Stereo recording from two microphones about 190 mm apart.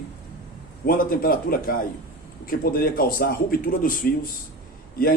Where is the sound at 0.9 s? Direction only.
50° left (ahead or behind).